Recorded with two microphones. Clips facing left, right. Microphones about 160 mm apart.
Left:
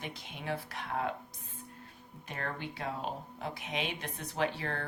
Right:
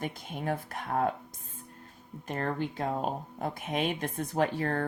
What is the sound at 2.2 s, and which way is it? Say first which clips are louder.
Speech: right 7 dB; 45° right (ahead or behind).